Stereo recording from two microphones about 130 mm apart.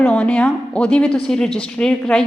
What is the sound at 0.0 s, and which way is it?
A woman's voice, 10° left (ahead or behind).